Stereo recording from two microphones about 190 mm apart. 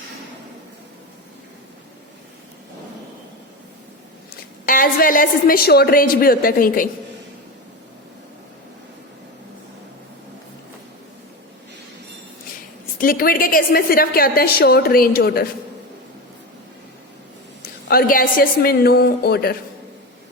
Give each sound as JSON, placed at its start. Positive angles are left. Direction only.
{"t": 4.6, "sound": "a woman's voice", "side_deg": 45}
{"t": 13.0, "sound": "a woman's voice", "side_deg": 50}
{"t": 17.8, "sound": "a woman's voice", "side_deg": 50}